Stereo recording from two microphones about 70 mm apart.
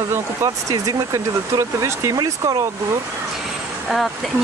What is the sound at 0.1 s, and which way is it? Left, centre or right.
Speech, right.